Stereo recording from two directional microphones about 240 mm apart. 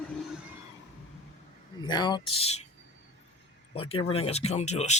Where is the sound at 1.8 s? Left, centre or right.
Centre.